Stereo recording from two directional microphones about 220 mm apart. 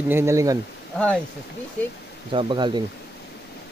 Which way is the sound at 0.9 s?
5° left (ahead or behind).